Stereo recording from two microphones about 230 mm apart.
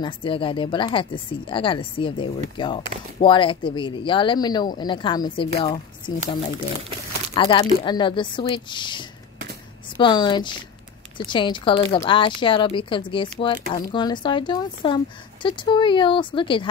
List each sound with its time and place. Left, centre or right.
0.0 s speech: left
7.3 s speech: left